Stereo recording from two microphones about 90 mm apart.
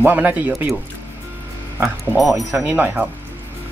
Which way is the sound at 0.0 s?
20° right (ahead or behind).